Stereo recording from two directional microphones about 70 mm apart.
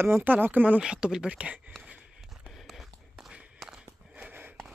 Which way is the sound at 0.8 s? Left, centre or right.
Centre.